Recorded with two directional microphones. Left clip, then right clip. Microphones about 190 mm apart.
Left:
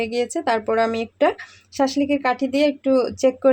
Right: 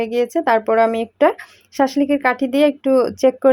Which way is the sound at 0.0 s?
10° right (ahead or behind).